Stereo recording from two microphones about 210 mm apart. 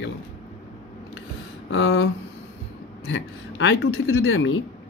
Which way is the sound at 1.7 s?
65° left (ahead or behind).